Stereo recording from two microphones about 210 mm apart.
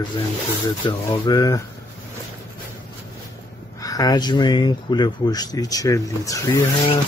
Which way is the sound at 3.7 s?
15° left (ahead or behind).